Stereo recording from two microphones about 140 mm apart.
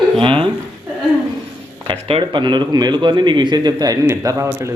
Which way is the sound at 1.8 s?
40° right (ahead or behind).